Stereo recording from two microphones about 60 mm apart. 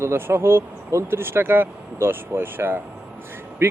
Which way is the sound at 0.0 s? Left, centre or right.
Right.